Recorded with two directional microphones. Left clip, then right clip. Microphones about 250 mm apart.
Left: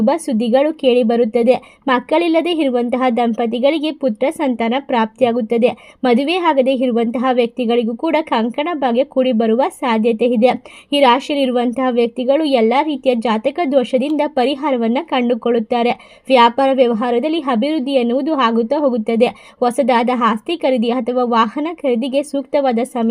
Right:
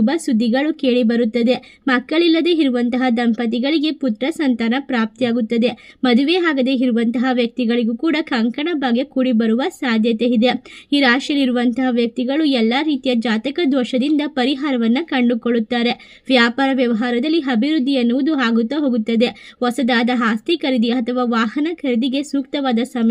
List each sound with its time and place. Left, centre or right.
0.0 s a woman's voice: left